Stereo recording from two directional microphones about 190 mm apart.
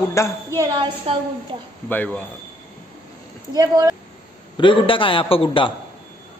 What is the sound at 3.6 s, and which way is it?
Speech, 20° right (ahead or behind).